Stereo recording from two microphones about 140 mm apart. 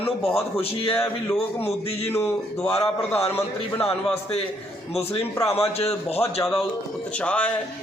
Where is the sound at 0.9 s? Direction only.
20° left (ahead or behind).